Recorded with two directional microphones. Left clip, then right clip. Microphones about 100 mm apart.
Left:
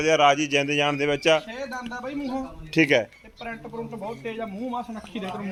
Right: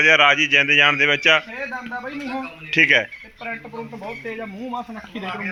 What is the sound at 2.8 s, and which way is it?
Speech, 20° left (ahead or behind).